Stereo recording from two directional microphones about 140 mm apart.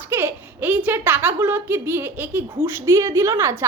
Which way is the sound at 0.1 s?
15° right (ahead or behind).